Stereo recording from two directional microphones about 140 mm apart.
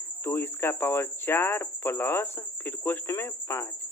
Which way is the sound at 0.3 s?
15° left (ahead or behind).